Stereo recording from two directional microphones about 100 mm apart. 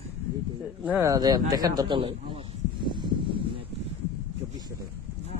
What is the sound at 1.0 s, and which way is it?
Speech, 35° right (ahead or behind).